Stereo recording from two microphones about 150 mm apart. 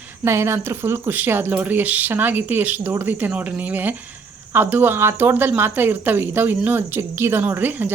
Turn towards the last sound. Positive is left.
turn(degrees=-15)  # may be behind; listen again after turning